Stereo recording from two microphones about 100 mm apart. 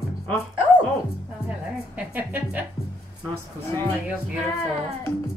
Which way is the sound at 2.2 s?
20° right (ahead or behind).